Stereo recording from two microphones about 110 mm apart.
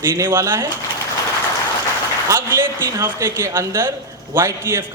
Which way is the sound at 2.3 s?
20° right (ahead or behind).